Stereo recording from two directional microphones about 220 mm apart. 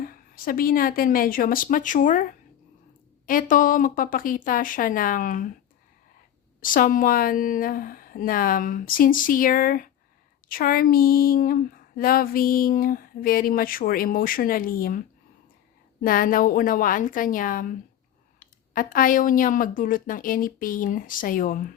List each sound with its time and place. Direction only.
0.0 s speech: 40° left (ahead or behind)
3.2 s speech: 40° left (ahead or behind)
6.6 s speech: 40° left (ahead or behind)